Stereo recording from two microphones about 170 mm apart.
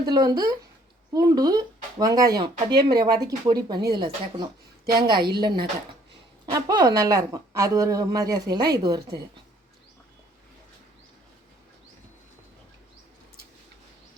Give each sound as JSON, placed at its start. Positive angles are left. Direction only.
{"t": 0.0, "sound": "speech", "side_deg": -25}
{"t": 3.8, "sound": "speech", "side_deg": -65}
{"t": 4.9, "sound": "speech", "side_deg": -25}